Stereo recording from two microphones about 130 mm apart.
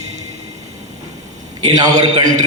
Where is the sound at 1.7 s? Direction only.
30° right (ahead or behind).